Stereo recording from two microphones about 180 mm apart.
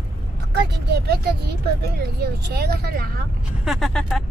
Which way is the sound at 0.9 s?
65° right (ahead or behind).